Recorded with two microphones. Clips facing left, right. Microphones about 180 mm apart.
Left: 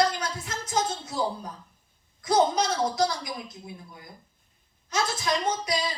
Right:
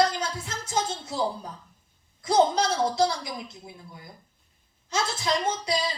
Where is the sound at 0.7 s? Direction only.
25° right (ahead or behind).